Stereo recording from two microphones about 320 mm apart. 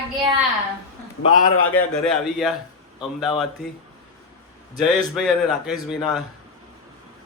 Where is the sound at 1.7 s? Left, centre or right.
Centre.